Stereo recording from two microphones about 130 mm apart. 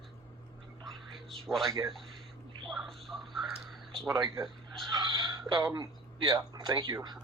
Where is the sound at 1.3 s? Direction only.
Centre (ahead or behind).